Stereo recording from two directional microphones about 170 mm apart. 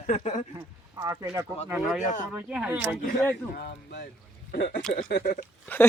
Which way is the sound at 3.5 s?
70° left (ahead or behind).